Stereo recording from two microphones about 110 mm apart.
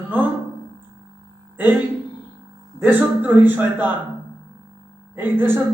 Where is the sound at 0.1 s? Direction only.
15° right (ahead or behind).